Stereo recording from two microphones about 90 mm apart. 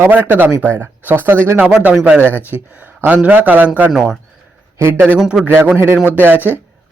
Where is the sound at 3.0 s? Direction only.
15° right (ahead or behind).